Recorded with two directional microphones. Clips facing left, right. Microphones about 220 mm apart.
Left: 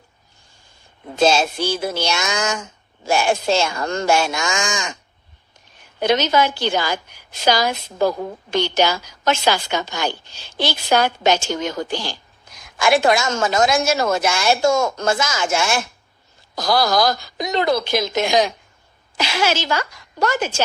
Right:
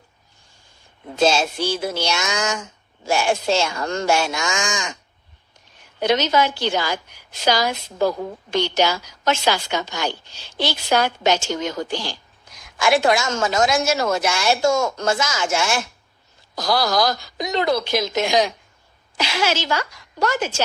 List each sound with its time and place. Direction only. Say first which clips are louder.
1.2 s a woman's voice: left 2 dB; 50° left (ahead or behind)
6.0 s a woman's voice: left 1 dB; 50° left (ahead or behind)